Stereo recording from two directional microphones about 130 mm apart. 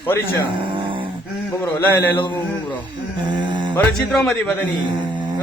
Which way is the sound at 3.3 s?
35° right (ahead or behind).